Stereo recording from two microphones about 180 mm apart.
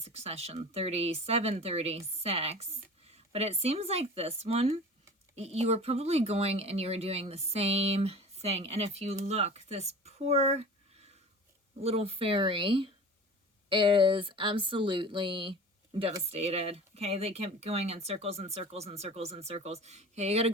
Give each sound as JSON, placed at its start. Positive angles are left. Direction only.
{"t": 0.0, "sound": "speech", "side_deg": -35}